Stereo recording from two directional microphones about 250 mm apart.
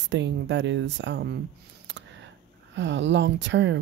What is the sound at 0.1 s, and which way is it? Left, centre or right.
Speech, right.